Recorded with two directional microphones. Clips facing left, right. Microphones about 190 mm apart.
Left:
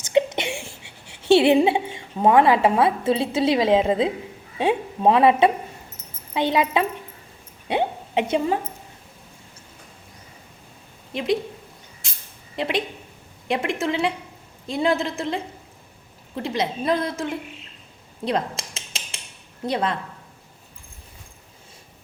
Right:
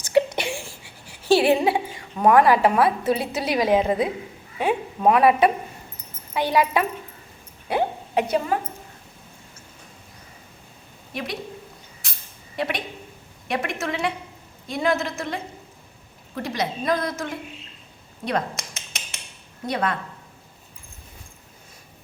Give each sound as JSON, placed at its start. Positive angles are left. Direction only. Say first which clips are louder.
{"t": 0.0, "sound": "a woman's voice", "louder": "even", "side_deg": 20}
{"t": 11.1, "sound": "a woman's voice", "louder": "left 8 dB", "side_deg": 25}
{"t": 12.5, "sound": "a woman's voice", "louder": "left 3 dB", "side_deg": 25}
{"t": 18.3, "sound": "cutlery", "louder": "left 1 dB", "side_deg": 30}
{"t": 19.6, "sound": "speech", "louder": "left 1 dB", "side_deg": 30}